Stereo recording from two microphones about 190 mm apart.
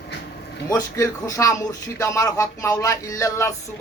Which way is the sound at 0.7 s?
15° left (ahead or behind).